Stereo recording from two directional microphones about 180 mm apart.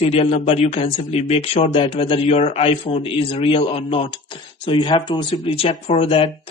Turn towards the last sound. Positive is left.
turn(degrees=30)  # may be behind; listen again after turning